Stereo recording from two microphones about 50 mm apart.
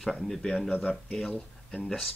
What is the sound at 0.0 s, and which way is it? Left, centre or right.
Speech, centre.